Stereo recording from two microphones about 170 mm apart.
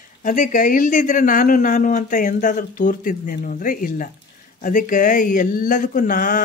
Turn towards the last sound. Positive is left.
turn(degrees=50)  # may be behind; listen again after turning